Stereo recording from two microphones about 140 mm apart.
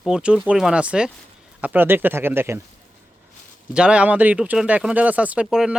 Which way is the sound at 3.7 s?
5° right (ahead or behind).